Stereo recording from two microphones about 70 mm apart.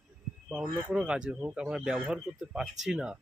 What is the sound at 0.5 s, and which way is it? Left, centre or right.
Speech, centre.